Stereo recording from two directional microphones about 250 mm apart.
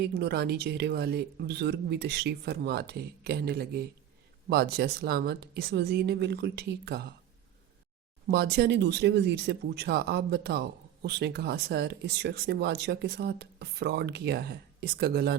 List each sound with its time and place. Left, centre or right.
0.0 s speech: right
8.3 s speech: right